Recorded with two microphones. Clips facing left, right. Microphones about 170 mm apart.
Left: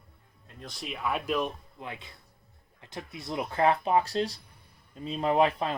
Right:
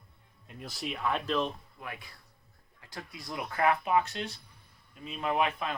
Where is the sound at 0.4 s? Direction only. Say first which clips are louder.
Right 2 dB; 5° right (ahead or behind); by 1.5 s 10° left (ahead or behind).